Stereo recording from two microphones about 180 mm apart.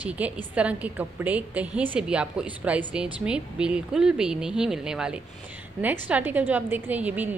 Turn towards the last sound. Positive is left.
turn(degrees=-10)  # may be behind; listen again after turning